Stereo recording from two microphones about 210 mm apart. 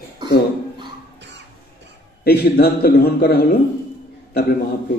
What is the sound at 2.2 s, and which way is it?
A man's voice, 50° left (ahead or behind).